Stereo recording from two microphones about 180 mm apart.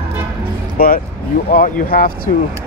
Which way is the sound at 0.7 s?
55° left (ahead or behind).